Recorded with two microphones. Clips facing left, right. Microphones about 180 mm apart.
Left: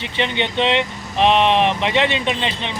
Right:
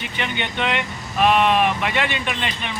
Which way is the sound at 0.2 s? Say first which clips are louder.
Left 6 dB; 25° left (ahead or behind).